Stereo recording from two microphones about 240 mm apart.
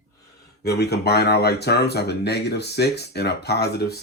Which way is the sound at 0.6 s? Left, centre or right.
Left.